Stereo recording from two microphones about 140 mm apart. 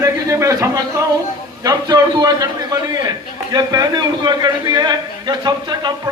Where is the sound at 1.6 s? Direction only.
30° right (ahead or behind).